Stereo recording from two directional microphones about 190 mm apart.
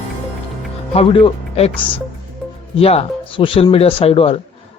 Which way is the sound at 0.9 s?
30° left (ahead or behind).